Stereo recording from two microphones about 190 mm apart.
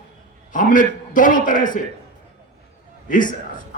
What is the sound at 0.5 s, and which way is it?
A man's voice, 45° left (ahead or behind).